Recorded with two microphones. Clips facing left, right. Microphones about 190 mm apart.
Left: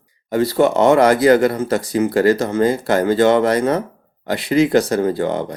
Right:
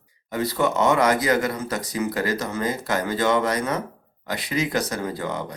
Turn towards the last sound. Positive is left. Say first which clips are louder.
# left 10 dB
turn(degrees=30)  # may be behind; listen again after turning